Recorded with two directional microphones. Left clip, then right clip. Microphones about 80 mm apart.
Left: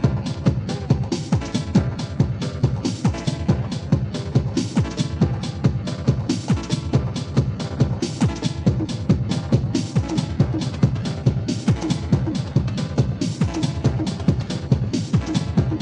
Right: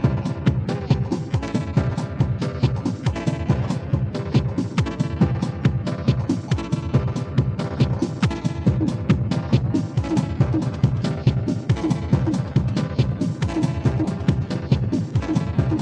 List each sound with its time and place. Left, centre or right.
0.0 s music: left
8.0 s music: left